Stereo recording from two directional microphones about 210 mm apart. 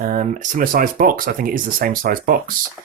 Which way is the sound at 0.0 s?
40° right (ahead or behind).